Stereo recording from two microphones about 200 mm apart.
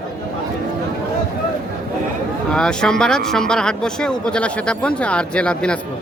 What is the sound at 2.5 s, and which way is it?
Speech, 5° left (ahead or behind).